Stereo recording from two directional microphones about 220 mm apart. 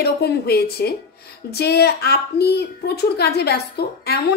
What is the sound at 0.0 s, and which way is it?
A woman's voice, 45° left (ahead or behind).